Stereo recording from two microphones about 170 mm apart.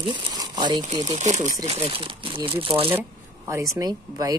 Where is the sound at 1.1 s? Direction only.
45° right (ahead or behind).